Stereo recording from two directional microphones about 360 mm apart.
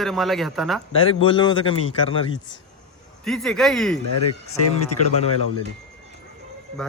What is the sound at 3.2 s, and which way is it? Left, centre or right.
Speech, centre.